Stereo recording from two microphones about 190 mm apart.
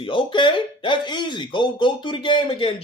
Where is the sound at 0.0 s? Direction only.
25° left (ahead or behind).